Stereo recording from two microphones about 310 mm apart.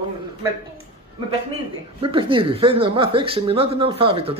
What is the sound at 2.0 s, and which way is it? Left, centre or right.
Speech, centre.